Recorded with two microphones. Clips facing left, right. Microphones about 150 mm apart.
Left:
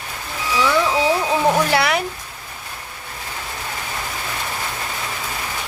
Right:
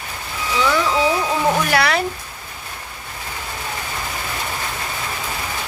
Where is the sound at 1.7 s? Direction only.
20° left (ahead or behind).